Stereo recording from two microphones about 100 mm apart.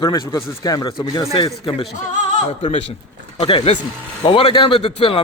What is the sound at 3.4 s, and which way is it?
Speech, 65° left (ahead or behind).